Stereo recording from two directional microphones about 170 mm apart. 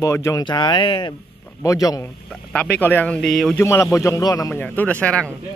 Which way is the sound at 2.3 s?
5° left (ahead or behind).